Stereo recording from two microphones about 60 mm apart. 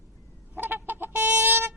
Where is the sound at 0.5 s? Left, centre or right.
Right.